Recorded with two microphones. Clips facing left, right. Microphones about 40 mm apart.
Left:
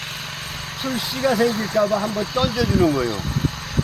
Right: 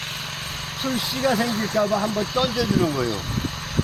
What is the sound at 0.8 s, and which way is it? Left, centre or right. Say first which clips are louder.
Speech: left 1 dB; centre.